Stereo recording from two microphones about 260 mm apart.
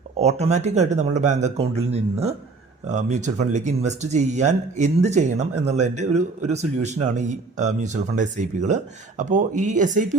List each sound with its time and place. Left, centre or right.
0.2 s speech: right